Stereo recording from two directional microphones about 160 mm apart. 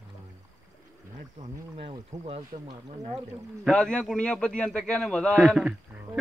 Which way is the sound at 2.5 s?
45° right (ahead or behind).